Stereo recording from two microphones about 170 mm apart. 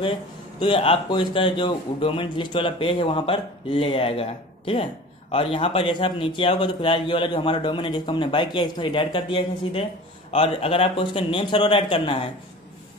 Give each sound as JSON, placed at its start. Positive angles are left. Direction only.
{"t": 0.6, "sound": "a man's voice", "side_deg": 30}